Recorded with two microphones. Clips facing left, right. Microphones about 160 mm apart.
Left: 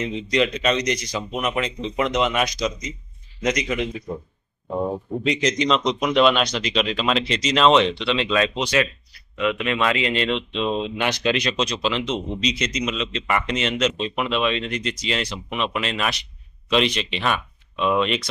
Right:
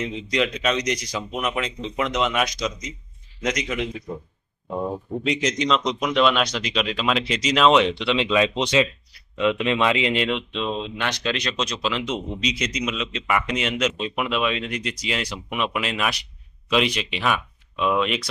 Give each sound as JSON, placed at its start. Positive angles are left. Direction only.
{"t": 0.0, "sound": "speech", "side_deg": 0}
{"t": 5.2, "sound": "speech", "side_deg": -5}
{"t": 10.7, "sound": "speech", "side_deg": 10}